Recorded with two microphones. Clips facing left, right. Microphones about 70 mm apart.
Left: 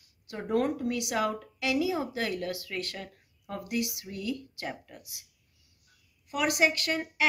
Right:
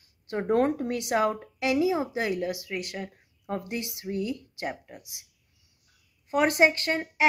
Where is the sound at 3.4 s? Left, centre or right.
Right.